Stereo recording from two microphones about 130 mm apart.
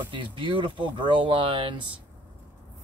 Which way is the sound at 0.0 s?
40° right (ahead or behind).